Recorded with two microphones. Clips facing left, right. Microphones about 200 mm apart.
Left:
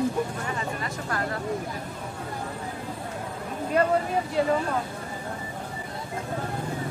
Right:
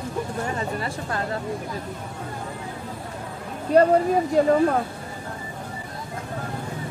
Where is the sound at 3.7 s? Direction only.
35° right (ahead or behind).